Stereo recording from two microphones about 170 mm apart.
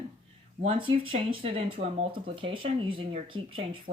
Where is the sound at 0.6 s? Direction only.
30° right (ahead or behind).